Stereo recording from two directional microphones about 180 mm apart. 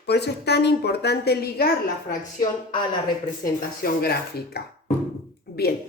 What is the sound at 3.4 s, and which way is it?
Speech, 50° left (ahead or behind).